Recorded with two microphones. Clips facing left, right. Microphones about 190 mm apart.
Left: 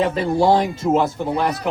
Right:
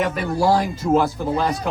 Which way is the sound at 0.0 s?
30° left (ahead or behind).